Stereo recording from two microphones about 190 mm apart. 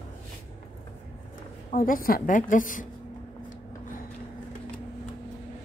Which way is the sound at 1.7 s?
45° left (ahead or behind).